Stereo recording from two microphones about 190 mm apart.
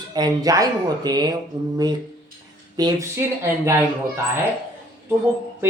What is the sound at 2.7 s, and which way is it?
Speech, 15° right (ahead or behind).